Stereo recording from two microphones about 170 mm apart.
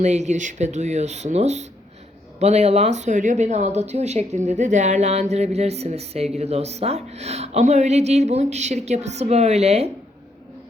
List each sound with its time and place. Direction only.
0.0 s a woman's voice: 45° right (ahead or behind)